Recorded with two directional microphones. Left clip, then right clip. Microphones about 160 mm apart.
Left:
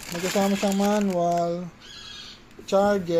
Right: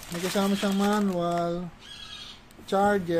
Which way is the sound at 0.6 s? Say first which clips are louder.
Left 3 dB; 20° right (ahead or behind).